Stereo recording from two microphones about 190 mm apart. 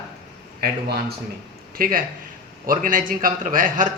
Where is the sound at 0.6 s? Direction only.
55° right (ahead or behind).